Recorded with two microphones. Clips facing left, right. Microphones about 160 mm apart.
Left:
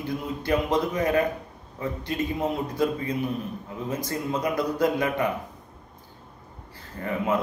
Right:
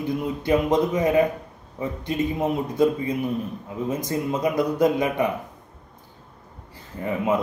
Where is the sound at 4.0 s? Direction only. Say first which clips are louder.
Right 3 dB; 20° right (ahead or behind).